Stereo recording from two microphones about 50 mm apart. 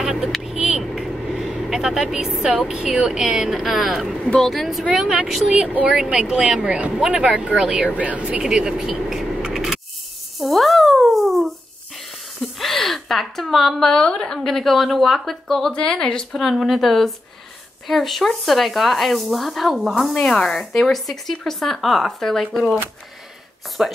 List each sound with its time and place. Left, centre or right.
0.0 s vehicle: centre
2.7 s speech: centre
4.4 s speech: centre
4.9 s speech: centre
5.6 s speech: right
6.1 s speech: centre
10.4 s a sound: centre
13.9 s speech: centre
15.7 s a woman's voice: centre
16.3 s speech: centre
20.2 s speech: centre
23.8 s speech: centre